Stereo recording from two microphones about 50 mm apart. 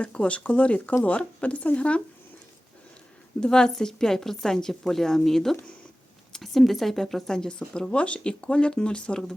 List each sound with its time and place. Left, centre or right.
0.0 s speech: left
3.4 s speech: centre